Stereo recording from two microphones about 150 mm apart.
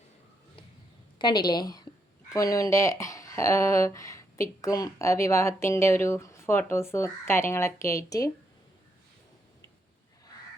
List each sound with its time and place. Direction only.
1.2 s speech: 30° left (ahead or behind)